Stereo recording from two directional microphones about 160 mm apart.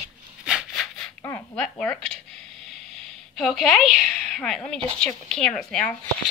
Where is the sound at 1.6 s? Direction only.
5° left (ahead or behind).